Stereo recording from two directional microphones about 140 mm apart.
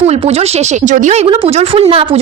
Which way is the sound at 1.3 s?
40° right (ahead or behind).